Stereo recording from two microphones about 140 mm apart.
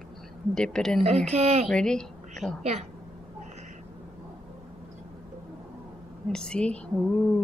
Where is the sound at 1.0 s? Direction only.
50° right (ahead or behind).